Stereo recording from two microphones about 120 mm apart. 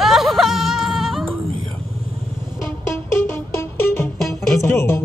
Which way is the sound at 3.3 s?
20° left (ahead or behind).